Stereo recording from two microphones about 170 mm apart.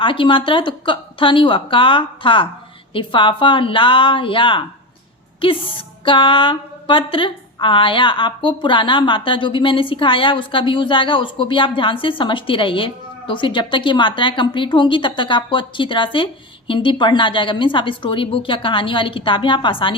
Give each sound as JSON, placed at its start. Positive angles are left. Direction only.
{"t": 0.0, "sound": "a woman's voice", "side_deg": 30}